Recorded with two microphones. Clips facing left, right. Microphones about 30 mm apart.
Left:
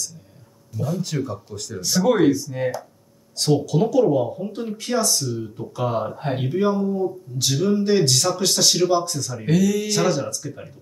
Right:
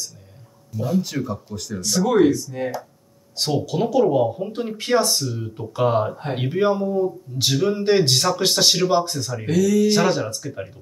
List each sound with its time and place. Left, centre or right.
0.8 s speech: centre
1.8 s speech: centre
3.3 s speech: centre
9.5 s speech: centre
9.8 s speech: right